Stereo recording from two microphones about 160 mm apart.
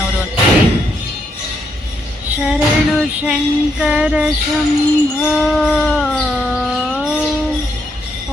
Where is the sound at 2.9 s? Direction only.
Centre (ahead or behind).